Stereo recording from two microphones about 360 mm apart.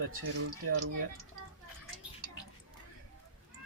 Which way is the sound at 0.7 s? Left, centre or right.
Right.